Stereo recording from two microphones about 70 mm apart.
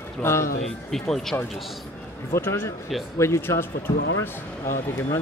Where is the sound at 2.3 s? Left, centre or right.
Left.